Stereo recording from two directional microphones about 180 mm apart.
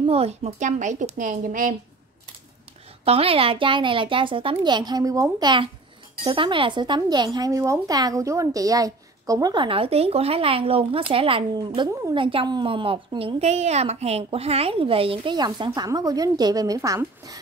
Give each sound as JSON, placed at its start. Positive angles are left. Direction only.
{"t": 0.0, "sound": "a woman's voice", "side_deg": -35}
{"t": 3.1, "sound": "speech", "side_deg": -30}
{"t": 11.9, "sound": "a woman's voice", "side_deg": -15}
{"t": 12.2, "sound": "speech", "side_deg": -30}